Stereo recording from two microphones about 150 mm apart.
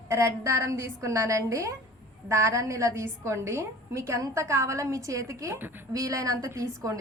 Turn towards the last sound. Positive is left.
turn(degrees=-20)  # may be behind; listen again after turning